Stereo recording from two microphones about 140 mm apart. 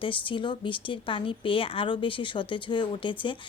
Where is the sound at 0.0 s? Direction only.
35° left (ahead or behind).